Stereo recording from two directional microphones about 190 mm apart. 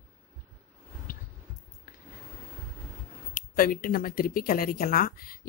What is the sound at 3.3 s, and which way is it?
Speech, 45° left (ahead or behind).